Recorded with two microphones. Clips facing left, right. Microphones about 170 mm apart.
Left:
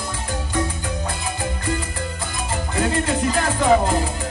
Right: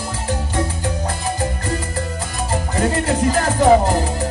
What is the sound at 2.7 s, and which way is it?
Music, 40° right (ahead or behind).